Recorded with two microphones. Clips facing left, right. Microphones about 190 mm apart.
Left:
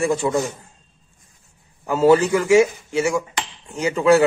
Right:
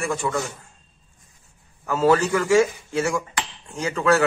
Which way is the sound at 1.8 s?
20° left (ahead or behind).